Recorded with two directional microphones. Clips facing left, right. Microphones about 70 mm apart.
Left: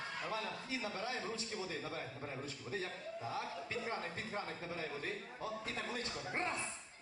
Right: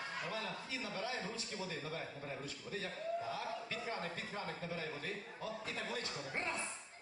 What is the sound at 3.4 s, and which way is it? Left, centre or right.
A man's voice, left.